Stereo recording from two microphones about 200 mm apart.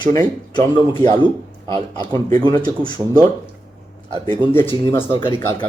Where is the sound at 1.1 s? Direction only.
25° right (ahead or behind).